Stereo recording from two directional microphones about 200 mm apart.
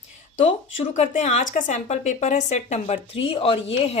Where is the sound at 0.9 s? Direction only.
35° left (ahead or behind).